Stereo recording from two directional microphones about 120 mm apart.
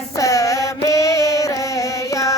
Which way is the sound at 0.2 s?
30° left (ahead or behind).